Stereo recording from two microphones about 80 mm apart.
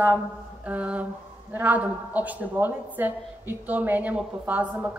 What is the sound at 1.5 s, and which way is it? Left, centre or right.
A woman's voice, right.